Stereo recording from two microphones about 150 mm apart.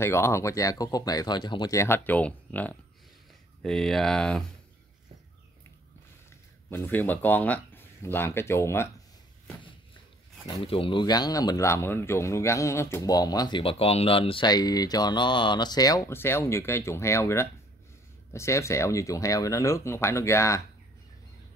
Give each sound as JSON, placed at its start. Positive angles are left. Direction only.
{"t": 0.0, "sound": "speech", "side_deg": 15}
{"t": 6.7, "sound": "speech", "side_deg": 15}
{"t": 10.6, "sound": "speech", "side_deg": 35}